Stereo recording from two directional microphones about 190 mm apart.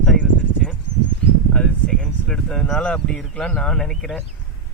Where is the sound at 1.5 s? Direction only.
5° left (ahead or behind).